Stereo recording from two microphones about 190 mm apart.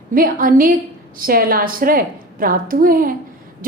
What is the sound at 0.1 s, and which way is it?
A woman's voice, 50° right (ahead or behind).